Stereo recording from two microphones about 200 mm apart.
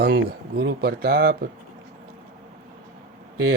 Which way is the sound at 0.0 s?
50° right (ahead or behind).